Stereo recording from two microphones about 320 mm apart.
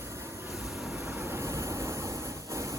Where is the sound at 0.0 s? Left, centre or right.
Centre.